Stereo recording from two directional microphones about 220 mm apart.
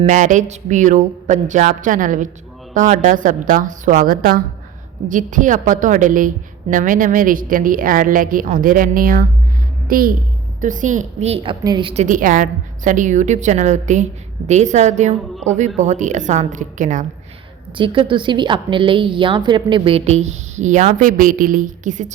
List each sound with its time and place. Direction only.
0.0 s a woman's voice: 35° right (ahead or behind)
12.0 s a woman's voice: 35° right (ahead or behind)
17.7 s a woman's voice: 20° right (ahead or behind)